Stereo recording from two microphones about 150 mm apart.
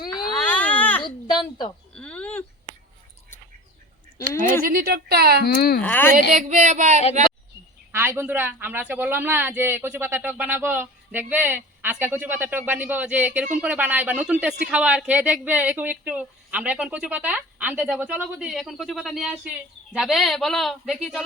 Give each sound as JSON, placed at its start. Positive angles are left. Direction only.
{"t": 0.0, "sound": "a sound", "side_deg": 30}
{"t": 0.3, "sound": "baby cry", "side_deg": 10}
{"t": 1.4, "sound": "a sound", "side_deg": 30}
{"t": 1.9, "sound": "a sound", "side_deg": 5}
{"t": 4.6, "sound": "speech", "side_deg": -80}
{"t": 5.5, "sound": "speech", "side_deg": 90}
{"t": 5.8, "sound": "speech", "side_deg": 10}
{"t": 6.3, "sound": "speech", "side_deg": -55}
{"t": 7.9, "sound": "speech", "side_deg": -15}